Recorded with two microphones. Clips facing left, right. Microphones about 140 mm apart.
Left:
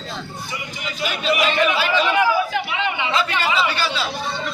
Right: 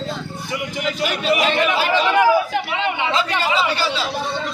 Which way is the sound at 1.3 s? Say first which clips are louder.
Even; 30° right (ahead or behind).